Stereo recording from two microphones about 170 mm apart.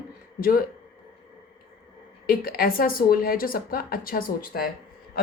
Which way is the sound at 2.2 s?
60° left (ahead or behind).